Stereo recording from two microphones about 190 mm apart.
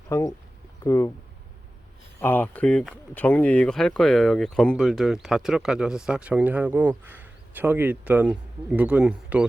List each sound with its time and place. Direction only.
0.1 s speech: 15° left (ahead or behind)
2.2 s speech: 10° left (ahead or behind)